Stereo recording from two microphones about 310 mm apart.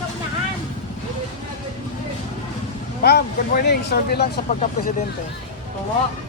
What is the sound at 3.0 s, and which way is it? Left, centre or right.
Speech, left.